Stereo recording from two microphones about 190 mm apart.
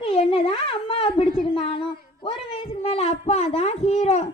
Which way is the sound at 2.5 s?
30° left (ahead or behind).